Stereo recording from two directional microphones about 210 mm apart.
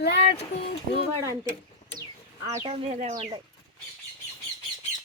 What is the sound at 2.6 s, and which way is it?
Speech, 30° right (ahead or behind).